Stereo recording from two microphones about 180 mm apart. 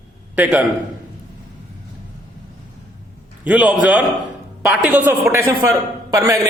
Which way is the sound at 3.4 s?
5° right (ahead or behind).